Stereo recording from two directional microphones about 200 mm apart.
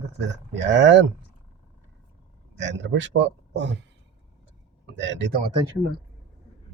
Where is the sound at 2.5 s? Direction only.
65° right (ahead or behind).